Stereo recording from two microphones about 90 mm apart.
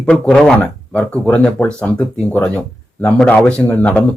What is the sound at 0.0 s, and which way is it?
Speech, 10° left (ahead or behind).